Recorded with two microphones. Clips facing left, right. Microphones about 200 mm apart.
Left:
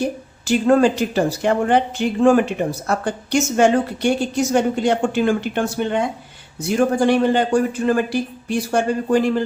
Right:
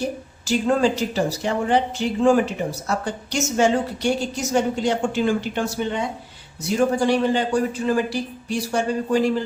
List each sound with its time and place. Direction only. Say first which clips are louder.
0.4 s a woman's voice: left 5 dB; 55° left (ahead or behind)